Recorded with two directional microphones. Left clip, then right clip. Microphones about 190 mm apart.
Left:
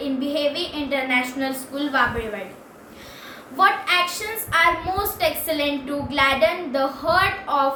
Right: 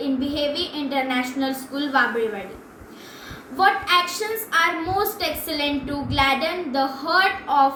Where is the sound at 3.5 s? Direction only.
15° left (ahead or behind).